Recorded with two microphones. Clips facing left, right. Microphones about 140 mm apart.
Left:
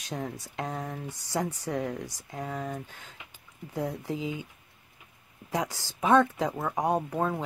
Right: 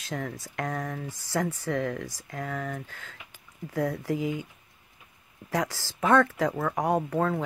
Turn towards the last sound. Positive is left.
turn(degrees=15)  # may be behind; listen again after turning